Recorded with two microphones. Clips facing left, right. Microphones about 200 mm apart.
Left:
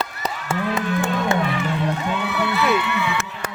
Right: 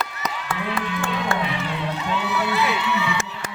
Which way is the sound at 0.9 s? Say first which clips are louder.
Left 4 dB; 45° left (ahead or behind).